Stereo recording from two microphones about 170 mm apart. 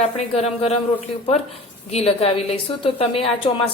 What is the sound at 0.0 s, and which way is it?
Speech, 35° left (ahead or behind).